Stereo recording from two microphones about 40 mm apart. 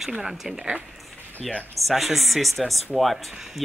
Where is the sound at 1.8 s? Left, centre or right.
Centre.